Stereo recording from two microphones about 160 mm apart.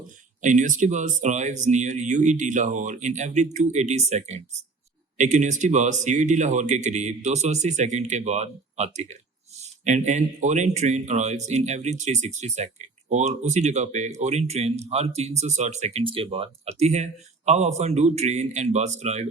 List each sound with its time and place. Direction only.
0.4 s speech: 50° right (ahead or behind)